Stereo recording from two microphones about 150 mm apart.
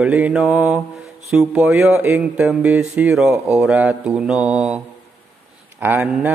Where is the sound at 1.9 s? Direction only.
15° right (ahead or behind).